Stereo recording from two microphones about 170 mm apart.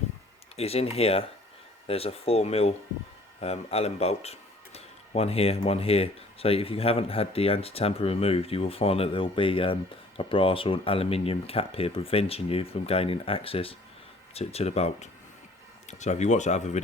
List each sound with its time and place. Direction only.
0.5 s speech: 35° left (ahead or behind)